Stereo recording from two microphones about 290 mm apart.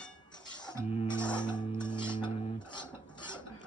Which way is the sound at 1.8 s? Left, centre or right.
Centre.